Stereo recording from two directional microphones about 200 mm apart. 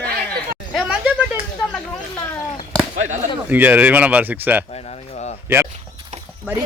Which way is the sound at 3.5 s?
10° right (ahead or behind).